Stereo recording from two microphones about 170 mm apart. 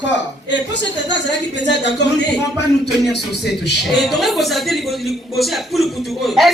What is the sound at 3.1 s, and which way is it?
Speech, 80° left.